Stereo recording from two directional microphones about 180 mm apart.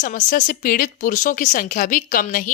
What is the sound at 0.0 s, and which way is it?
A woman's voice, 45° left (ahead or behind).